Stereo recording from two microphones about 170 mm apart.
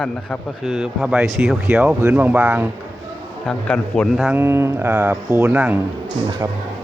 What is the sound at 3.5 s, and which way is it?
Speech, 5° left (ahead or behind).